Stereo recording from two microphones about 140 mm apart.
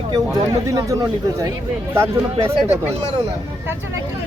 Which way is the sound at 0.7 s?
25° right (ahead or behind).